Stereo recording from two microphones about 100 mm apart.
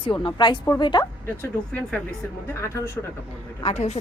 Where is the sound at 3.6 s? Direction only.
90° left.